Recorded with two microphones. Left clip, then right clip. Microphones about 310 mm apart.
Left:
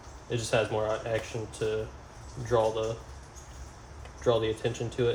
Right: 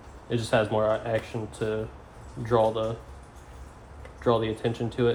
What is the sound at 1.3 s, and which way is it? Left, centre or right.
Speech, right.